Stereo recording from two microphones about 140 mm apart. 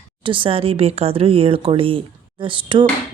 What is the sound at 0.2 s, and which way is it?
A woman's voice, 40° right (ahead or behind).